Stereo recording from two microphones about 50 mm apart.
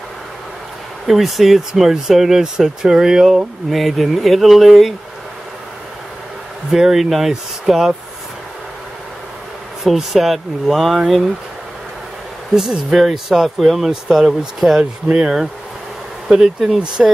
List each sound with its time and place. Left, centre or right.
1.0 s speech: centre
6.7 s speech: centre
9.8 s speech: centre
12.5 s speech: centre